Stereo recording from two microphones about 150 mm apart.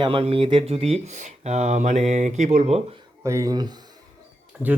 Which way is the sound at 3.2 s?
20° right (ahead or behind).